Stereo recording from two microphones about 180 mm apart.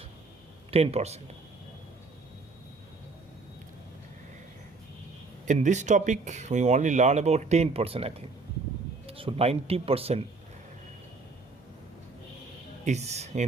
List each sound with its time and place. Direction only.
0.7 s speech: 35° right (ahead or behind)
5.5 s speech: 40° right (ahead or behind)
12.8 s speech: 40° right (ahead or behind)